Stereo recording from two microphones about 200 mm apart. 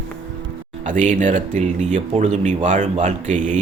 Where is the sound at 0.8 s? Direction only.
40° right (ahead or behind).